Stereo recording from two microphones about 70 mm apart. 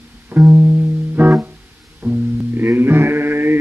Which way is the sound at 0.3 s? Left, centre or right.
Right.